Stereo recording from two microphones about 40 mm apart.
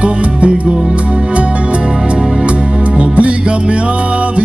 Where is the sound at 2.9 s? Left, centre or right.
Right.